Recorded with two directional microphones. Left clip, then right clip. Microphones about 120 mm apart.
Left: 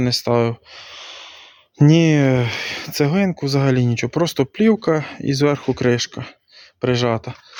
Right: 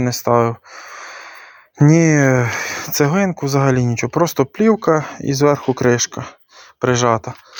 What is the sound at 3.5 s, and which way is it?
Speech, 40° left (ahead or behind).